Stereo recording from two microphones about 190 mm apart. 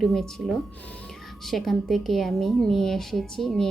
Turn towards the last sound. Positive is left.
turn(degrees=0)  # may be behind; listen again after turning